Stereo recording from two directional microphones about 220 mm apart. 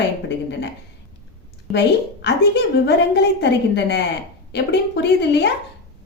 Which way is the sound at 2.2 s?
50° left (ahead or behind).